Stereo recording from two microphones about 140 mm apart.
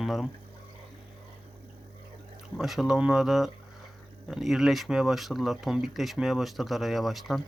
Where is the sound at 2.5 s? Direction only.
Centre (ahead or behind).